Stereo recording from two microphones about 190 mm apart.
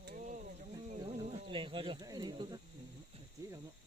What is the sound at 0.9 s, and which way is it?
Speech, 25° right (ahead or behind).